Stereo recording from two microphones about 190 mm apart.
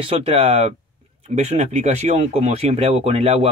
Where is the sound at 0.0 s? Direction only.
30° right (ahead or behind).